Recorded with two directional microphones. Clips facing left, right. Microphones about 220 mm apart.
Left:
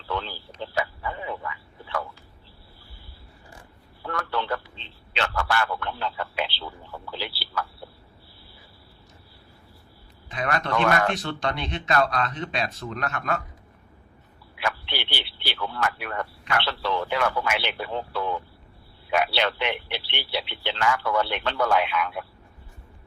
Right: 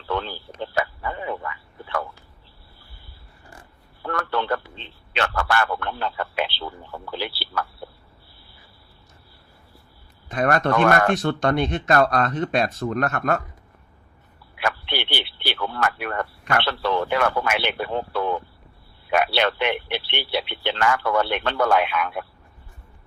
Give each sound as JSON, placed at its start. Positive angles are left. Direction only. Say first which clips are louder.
{"t": 0.1, "sound": "a sound", "louder": "right 4 dB", "side_deg": -55}
{"t": 4.0, "sound": "speech", "louder": "right 4 dB", "side_deg": -55}
{"t": 10.2, "sound": "speech", "louder": "right 7 dB", "side_deg": -50}
{"t": 14.6, "sound": "speech", "louder": "right 3 dB", "side_deg": -55}